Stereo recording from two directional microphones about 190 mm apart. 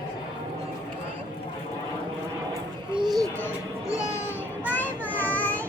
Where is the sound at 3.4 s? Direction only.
15° left (ahead or behind).